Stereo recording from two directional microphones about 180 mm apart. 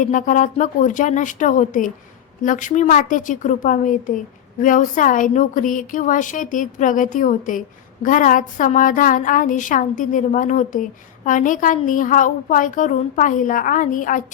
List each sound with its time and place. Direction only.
0.0 s a woman's voice: 45° left (ahead or behind)